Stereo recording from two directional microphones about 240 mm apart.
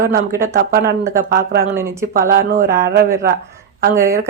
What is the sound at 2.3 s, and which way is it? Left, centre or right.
Speech, right.